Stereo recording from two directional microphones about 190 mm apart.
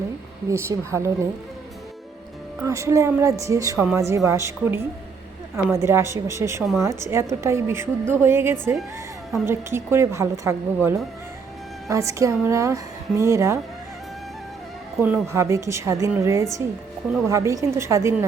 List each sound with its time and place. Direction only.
0.5 s a woman's voice: 15° right (ahead or behind)
2.6 s a woman's voice: 15° right (ahead or behind)
15.0 s a woman's voice: 10° right (ahead or behind)